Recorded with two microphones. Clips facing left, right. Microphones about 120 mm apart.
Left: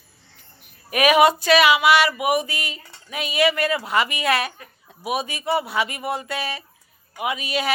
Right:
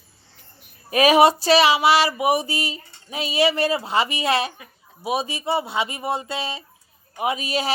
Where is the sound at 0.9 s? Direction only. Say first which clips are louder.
Right 1 dB; 30° right (ahead or behind).